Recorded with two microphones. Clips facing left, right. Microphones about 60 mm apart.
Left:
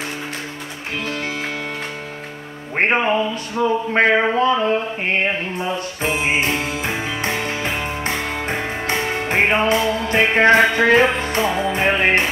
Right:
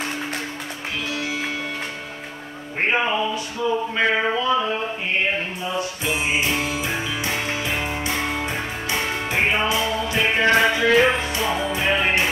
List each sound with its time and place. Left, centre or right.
1.0 s music: left
2.7 s speech: left
3.5 s mantra: left
5.6 s music: left